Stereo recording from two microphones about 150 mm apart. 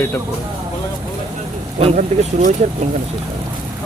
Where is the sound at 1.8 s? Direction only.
50° right (ahead or behind).